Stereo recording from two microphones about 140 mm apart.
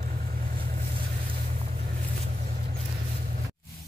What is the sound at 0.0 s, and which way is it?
Vehicle, 65° right (ahead or behind).